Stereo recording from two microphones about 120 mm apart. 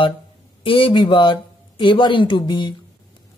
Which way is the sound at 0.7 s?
45° left (ahead or behind).